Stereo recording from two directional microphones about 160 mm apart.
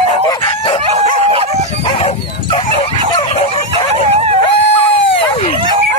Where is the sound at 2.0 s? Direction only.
35° left (ahead or behind).